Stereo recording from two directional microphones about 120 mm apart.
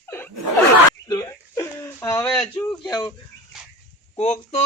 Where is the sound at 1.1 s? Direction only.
25° left (ahead or behind).